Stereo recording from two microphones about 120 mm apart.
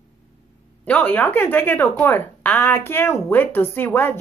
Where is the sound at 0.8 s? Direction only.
15° left (ahead or behind).